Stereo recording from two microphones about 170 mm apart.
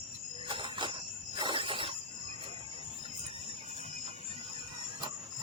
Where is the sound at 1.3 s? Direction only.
30° right (ahead or behind).